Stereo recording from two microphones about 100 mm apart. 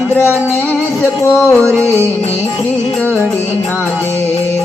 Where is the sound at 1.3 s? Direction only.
25° left (ahead or behind).